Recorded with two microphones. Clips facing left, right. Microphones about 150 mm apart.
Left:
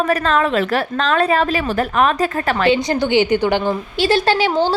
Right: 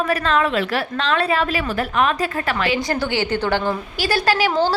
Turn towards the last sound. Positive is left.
turn(degrees=25)  # may be behind; listen again after turning